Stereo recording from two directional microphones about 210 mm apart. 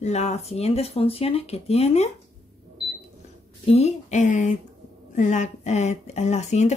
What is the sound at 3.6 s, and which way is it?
Speech, 30° left (ahead or behind).